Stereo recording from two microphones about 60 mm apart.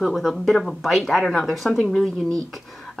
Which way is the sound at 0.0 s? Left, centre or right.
Centre.